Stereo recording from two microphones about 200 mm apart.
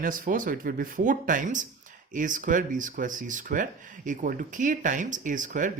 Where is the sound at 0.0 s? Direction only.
45° right (ahead or behind).